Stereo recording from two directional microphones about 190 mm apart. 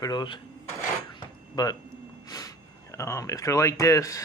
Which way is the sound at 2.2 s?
20° left (ahead or behind).